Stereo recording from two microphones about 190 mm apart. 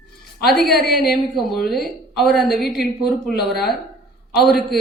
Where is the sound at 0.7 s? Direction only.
55° left (ahead or behind).